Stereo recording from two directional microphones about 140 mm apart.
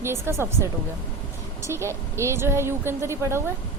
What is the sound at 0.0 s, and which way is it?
A woman's voice, 20° right (ahead or behind).